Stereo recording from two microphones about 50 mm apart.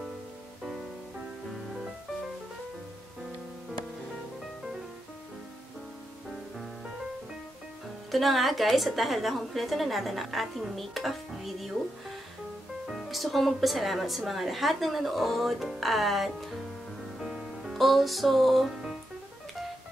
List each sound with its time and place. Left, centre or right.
8.1 s speech: centre
12.8 s speech: centre
17.3 s music: centre
17.7 s speech: centre